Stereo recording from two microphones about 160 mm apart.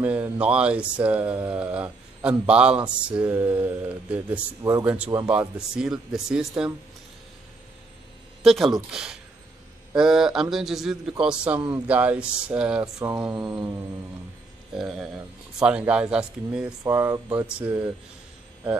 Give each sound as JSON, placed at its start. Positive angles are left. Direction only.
{"t": 0.0, "sound": "a man's voice", "side_deg": -10}
{"t": 8.4, "sound": "a man's voice", "side_deg": 0}
{"t": 12.8, "sound": "mantra", "side_deg": -20}
{"t": 14.7, "sound": "a man's voice", "side_deg": 0}
{"t": 16.8, "sound": "speech", "side_deg": -15}